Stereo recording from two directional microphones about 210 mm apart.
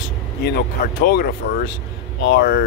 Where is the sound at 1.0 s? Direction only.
50° left (ahead or behind).